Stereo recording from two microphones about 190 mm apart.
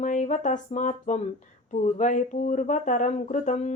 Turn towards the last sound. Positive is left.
turn(degrees=40)  # may be behind; listen again after turning